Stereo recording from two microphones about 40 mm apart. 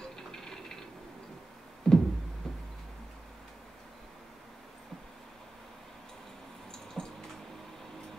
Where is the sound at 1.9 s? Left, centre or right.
Centre.